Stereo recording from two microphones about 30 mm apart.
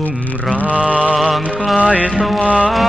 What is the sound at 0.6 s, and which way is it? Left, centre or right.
Mantra, right.